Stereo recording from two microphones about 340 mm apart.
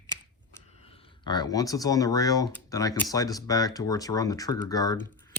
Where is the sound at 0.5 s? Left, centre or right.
Centre.